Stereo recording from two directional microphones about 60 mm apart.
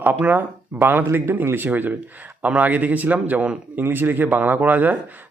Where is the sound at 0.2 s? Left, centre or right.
Right.